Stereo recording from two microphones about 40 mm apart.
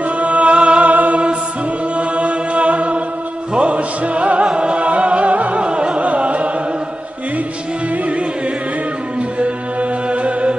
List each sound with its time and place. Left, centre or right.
0.2 s music: right
9.4 s music: right